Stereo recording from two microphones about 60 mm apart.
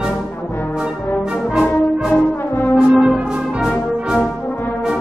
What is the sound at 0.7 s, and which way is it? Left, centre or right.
Brass instrument, centre.